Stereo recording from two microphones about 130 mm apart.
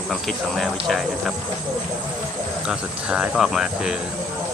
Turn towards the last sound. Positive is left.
turn(degrees=-5)  # may be behind; listen again after turning